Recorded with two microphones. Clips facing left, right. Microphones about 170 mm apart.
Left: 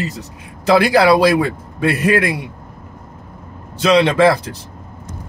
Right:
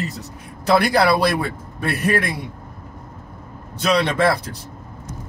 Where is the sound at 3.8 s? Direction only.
85° left.